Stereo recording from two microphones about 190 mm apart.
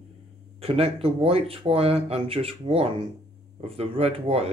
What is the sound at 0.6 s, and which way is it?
Speech, 30° right (ahead or behind).